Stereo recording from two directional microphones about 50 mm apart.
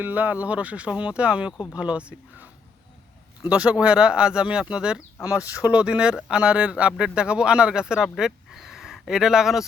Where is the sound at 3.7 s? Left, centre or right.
Right.